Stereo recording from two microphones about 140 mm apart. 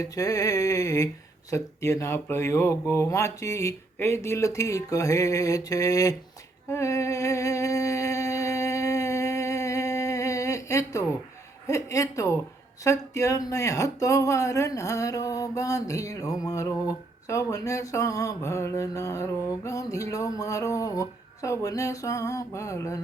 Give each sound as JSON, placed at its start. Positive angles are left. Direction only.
{"t": 0.0, "sound": "speech", "side_deg": 25}
{"t": 6.7, "sound": "a sound", "side_deg": 20}
{"t": 11.7, "sound": "speech", "side_deg": 20}